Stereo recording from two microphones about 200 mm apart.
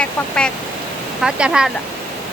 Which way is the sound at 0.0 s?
5° left (ahead or behind).